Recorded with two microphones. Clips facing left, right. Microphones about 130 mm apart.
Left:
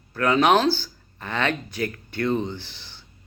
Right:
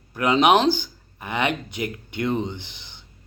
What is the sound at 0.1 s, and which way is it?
Speech, 15° right (ahead or behind).